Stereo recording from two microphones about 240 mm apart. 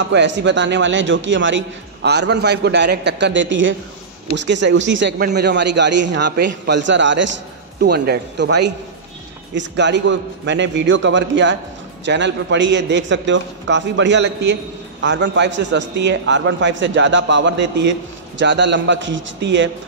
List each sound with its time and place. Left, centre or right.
0.1 s a man's voice: right